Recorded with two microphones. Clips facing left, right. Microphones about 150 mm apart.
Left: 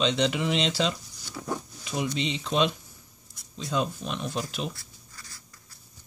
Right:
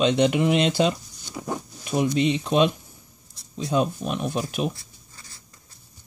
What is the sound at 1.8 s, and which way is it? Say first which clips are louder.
Speech: right 8 dB; 50° right (ahead or behind).